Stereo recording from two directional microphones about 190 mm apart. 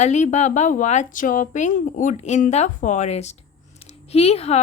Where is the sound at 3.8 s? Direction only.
30° left (ahead or behind).